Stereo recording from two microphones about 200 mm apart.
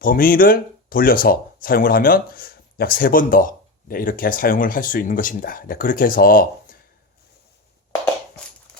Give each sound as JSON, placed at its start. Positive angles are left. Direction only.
{"t": 0.0, "sound": "speech", "side_deg": 45}